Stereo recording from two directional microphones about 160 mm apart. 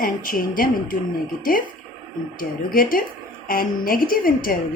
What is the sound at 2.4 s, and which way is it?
A woman's voice, 60° left (ahead or behind).